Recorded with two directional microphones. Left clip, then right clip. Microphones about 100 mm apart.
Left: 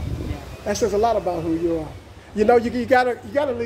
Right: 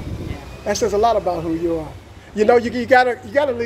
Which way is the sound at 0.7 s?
35° left (ahead or behind).